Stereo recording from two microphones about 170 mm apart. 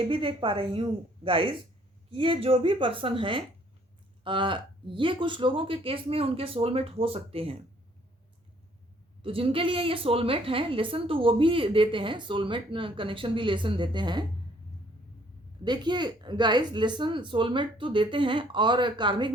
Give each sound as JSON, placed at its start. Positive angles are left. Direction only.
{"t": 0.0, "sound": "a woman's voice", "side_deg": -30}
{"t": 9.2, "sound": "a woman's voice", "side_deg": -35}
{"t": 15.6, "sound": "speech", "side_deg": -25}